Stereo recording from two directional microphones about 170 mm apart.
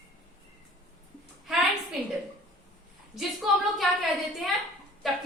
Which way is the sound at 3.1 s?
Centre (ahead or behind).